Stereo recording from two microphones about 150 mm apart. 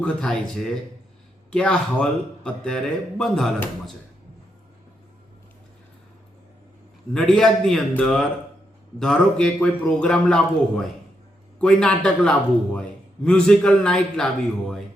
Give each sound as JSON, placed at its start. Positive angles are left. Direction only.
{"t": 0.0, "sound": "a man's voice", "side_deg": 5}
{"t": 7.1, "sound": "a man's voice", "side_deg": 5}